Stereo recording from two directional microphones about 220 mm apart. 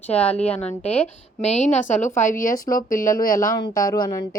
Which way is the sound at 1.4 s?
30° left (ahead or behind).